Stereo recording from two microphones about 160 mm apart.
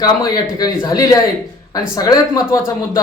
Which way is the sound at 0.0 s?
25° left (ahead or behind).